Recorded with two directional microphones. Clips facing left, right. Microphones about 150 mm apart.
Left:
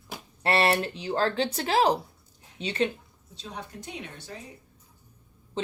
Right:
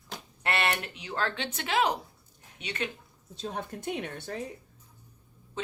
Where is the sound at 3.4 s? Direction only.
50° right (ahead or behind).